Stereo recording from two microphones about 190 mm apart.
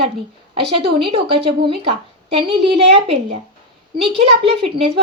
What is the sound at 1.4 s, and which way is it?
A woman's voice, 30° right (ahead or behind).